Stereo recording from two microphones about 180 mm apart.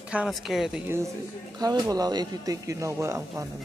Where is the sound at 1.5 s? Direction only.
20° right (ahead or behind).